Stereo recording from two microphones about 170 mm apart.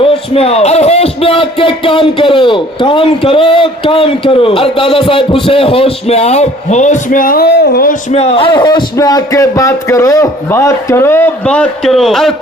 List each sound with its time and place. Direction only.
0.0 s speech: 35° left (ahead or behind); by 7.9 s 85° left
8.1 s speech: 35° left (ahead or behind); by 12.3 s centre (ahead or behind)